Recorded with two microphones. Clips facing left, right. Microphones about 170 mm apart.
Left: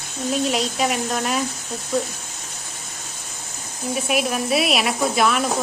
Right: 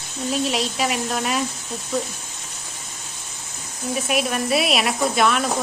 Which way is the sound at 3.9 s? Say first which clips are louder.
Left 1 dB; centre (ahead or behind).